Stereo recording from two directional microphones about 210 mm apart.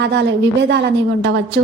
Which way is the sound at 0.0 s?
55° right (ahead or behind).